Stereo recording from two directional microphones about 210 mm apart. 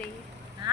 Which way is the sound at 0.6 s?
20° right (ahead or behind).